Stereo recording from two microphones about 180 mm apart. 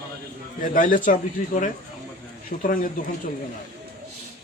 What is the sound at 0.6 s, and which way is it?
Speech, 50° left (ahead or behind).